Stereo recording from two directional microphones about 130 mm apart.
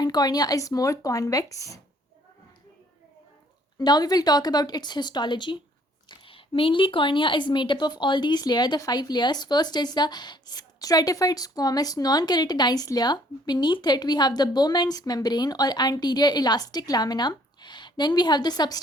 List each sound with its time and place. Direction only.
0.0 s speech: 30° left (ahead or behind)
3.8 s speech: 30° left (ahead or behind)